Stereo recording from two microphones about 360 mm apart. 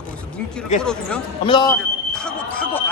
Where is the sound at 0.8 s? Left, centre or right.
Centre.